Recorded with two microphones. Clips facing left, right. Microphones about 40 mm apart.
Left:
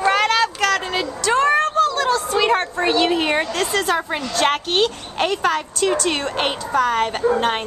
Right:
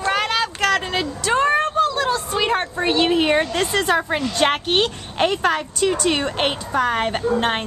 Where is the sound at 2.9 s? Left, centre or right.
Centre.